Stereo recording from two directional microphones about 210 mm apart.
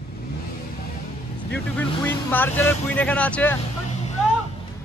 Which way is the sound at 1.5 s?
10° left (ahead or behind).